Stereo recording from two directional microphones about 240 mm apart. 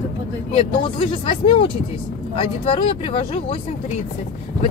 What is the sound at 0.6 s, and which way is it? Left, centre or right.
Speech, left.